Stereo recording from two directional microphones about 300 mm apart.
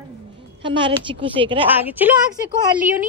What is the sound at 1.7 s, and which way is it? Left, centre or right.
A woman's voice, centre.